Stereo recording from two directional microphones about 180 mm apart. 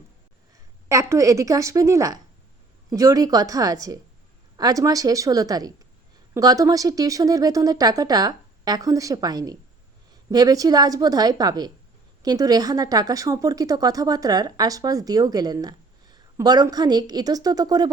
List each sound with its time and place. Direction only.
0.9 s a woman's voice: 15° right (ahead or behind)